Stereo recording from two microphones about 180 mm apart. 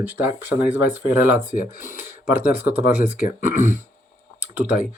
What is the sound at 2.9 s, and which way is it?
Speech, 45° left (ahead or behind).